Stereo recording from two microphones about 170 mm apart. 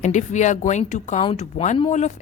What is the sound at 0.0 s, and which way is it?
A woman's voice, 45° left (ahead or behind).